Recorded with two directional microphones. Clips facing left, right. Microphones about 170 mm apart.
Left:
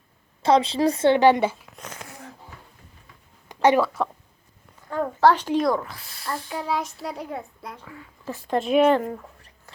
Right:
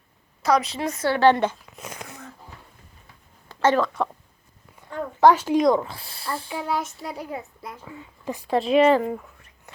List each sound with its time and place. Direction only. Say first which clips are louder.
0.4 s a woman's voice: left 3 dB; 30° left (ahead or behind)
1.3 s speech: even; 10° left (ahead or behind)
1.7 s a sound: right 2 dB; 10° right (ahead or behind)
3.5 s speech: left 2 dB; 15° left (ahead or behind)
5.2 s speech: right 3 dB; 10° right (ahead or behind)
5.6 s speech: right 4 dB; 25° right (ahead or behind)
6.5 s a child's voice: even; centre (ahead or behind)
7.9 s speech: right 4 dB; 15° right (ahead or behind)
8.4 s a child's voice: right 1 dB; centre (ahead or behind)
9.7 s a sound: right 3 dB; 20° right (ahead or behind)